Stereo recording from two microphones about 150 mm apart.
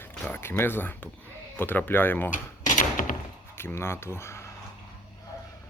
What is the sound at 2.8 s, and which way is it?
Thunk, 60° left (ahead or behind).